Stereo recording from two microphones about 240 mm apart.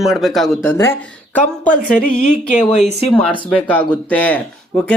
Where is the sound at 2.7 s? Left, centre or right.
Left.